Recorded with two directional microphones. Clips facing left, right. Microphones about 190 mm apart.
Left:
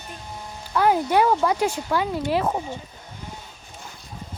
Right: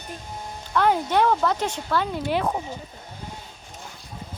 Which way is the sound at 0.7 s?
10° left (ahead or behind).